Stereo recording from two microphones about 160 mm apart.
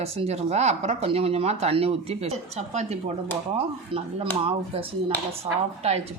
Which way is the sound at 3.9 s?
35° right (ahead or behind).